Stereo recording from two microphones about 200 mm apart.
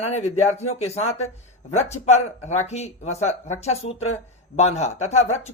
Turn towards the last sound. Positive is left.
turn(degrees=35)  # may be behind; listen again after turning